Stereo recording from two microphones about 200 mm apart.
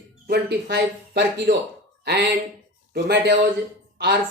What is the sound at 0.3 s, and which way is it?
Speech, 55° right (ahead or behind).